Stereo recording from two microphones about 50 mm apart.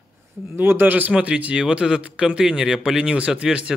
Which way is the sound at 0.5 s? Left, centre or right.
Right.